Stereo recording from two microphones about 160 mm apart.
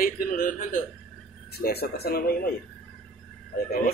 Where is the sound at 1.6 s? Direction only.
80° left.